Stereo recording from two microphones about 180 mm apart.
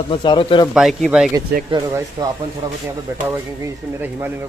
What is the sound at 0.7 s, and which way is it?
Speech, centre (ahead or behind).